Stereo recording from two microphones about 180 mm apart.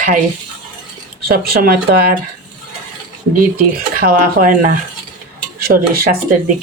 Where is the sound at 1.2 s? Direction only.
55° right (ahead or behind).